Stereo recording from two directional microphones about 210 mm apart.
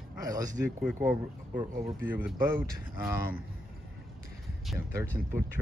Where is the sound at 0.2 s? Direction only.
15° right (ahead or behind).